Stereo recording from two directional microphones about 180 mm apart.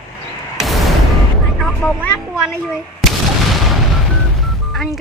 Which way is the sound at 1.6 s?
5° left (ahead or behind).